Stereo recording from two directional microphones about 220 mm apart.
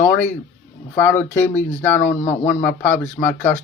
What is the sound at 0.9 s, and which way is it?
Speech, 10° left (ahead or behind).